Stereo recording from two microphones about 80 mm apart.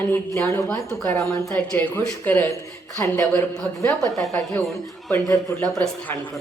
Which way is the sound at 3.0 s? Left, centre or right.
Left.